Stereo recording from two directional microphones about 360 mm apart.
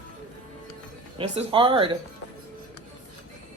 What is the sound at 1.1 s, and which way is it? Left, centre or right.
Speech, centre.